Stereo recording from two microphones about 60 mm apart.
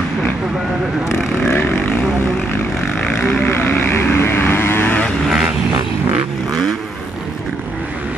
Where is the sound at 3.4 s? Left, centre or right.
Left.